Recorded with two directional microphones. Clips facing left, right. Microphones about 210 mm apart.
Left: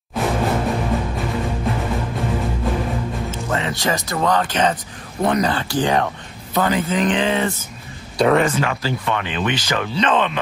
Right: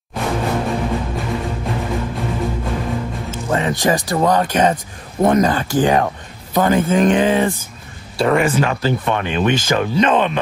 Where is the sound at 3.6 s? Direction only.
45° right (ahead or behind).